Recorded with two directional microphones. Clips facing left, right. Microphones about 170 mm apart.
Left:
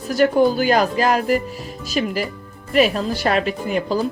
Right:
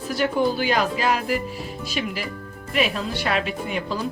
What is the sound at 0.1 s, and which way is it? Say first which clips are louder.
Speech: left 6 dB; 45° left (ahead or behind).